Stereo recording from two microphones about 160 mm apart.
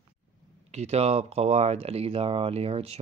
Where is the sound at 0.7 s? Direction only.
45° right (ahead or behind).